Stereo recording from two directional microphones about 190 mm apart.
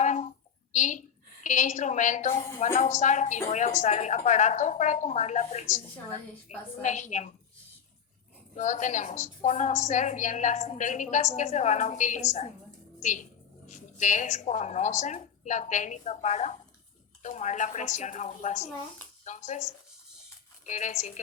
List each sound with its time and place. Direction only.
0.0 s a sound: 40° left (ahead or behind)
0.7 s a woman's voice: 40° left (ahead or behind)
8.5 s a woman's voice: 40° left (ahead or behind)
20.7 s a woman's voice: 40° left (ahead or behind)